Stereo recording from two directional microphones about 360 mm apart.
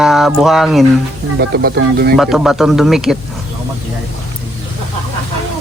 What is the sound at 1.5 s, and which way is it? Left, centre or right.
Speech, right.